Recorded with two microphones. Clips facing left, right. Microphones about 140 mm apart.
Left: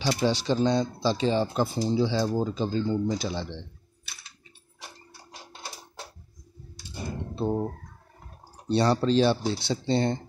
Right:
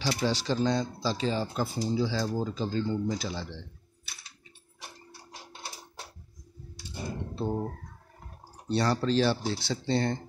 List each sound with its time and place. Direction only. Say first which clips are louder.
0.0 s speech: left 4 dB; 20° left (ahead or behind)
7.3 s a sound: left 4 dB; 20° left (ahead or behind)
8.6 s speech: left 4 dB; 20° left (ahead or behind)